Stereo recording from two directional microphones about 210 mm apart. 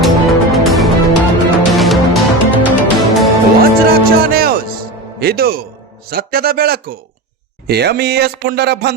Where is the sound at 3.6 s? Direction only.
45° right (ahead or behind).